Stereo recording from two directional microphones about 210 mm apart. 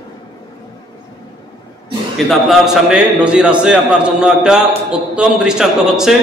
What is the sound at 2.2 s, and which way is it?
A man's voice, centre (ahead or behind).